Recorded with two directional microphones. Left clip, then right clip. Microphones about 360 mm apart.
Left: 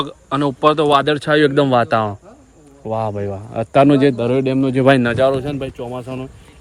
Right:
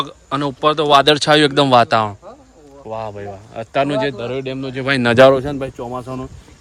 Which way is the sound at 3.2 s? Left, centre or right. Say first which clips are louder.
Left 5 dB; centre.